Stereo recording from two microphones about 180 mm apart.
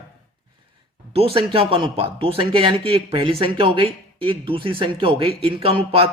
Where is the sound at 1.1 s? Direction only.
35° right (ahead or behind).